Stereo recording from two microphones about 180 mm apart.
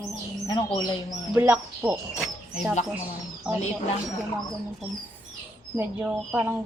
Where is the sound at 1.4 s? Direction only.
10° right (ahead or behind).